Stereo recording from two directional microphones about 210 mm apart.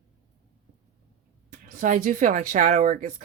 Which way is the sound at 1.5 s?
40° right (ahead or behind).